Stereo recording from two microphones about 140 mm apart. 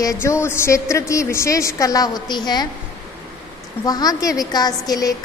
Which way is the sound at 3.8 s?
25° left (ahead or behind).